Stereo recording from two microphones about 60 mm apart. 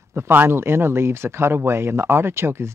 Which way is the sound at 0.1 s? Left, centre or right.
Right.